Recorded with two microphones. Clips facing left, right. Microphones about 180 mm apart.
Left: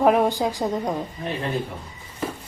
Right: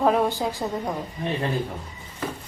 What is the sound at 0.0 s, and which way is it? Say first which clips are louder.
Speech: left 3 dB; 15° left (ahead or behind).